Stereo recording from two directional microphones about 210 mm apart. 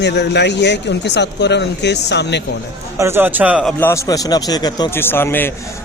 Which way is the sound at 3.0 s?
10° right (ahead or behind).